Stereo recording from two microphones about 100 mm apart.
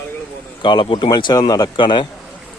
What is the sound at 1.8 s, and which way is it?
Speech, 55° left (ahead or behind).